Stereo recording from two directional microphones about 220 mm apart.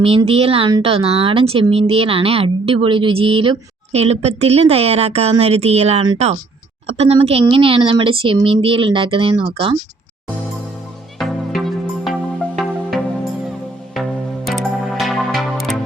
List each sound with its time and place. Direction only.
0.0 s a woman's voice: 25° right (ahead or behind)
11.2 s music: centre (ahead or behind)
14.4 s music: centre (ahead or behind)